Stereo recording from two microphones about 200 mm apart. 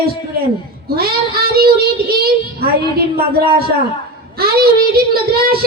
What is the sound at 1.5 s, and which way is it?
Speech, 50° right (ahead or behind).